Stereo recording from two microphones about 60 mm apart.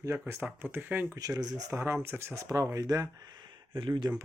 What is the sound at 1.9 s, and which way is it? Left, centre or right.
Speech, right.